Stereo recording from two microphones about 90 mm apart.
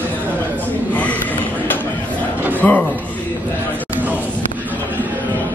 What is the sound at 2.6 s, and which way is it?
Speech, 20° left (ahead or behind).